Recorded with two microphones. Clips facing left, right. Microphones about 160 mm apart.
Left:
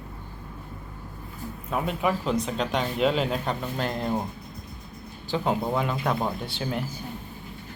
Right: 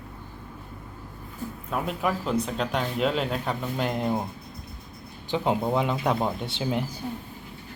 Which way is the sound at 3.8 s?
15° right (ahead or behind).